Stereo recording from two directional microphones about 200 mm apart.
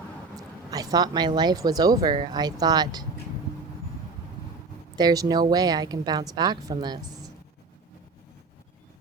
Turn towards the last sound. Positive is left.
turn(degrees=-20)  # may be behind; listen again after turning